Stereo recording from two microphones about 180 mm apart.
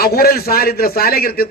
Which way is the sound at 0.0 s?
55° left (ahead or behind).